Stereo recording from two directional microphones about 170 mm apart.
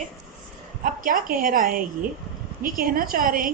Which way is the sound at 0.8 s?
55° right (ahead or behind).